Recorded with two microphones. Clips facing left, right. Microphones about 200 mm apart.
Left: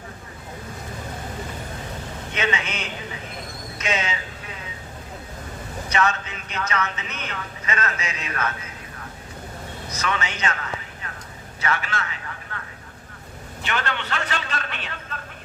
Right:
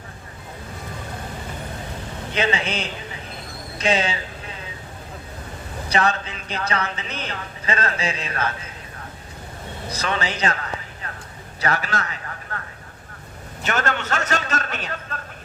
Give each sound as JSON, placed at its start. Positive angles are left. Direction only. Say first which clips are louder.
{"t": 2.3, "sound": "speech", "louder": "right 4 dB", "side_deg": -30}
{"t": 5.9, "sound": "speech", "louder": "right 2 dB", "side_deg": -35}
{"t": 9.9, "sound": "a man's voice", "louder": "right 2 dB", "side_deg": -35}
{"t": 11.6, "sound": "a sound", "louder": "right 2 dB", "side_deg": -40}
{"t": 13.6, "sound": "a man's voice", "louder": "right 4 dB", "side_deg": -45}